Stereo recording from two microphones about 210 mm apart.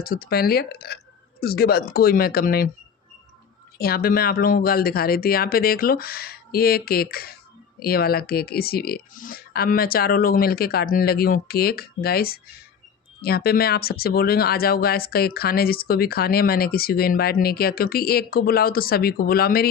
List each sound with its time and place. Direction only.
0.0 s speech: 45° left (ahead or behind)
3.8 s speech: 45° left (ahead or behind)